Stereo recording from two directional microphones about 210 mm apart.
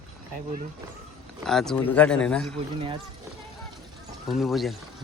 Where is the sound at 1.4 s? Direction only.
Centre (ahead or behind).